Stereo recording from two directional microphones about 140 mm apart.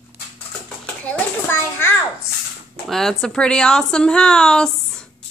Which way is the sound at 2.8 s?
Centre (ahead or behind).